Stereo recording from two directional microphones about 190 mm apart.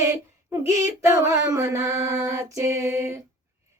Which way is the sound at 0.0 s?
15° right (ahead or behind).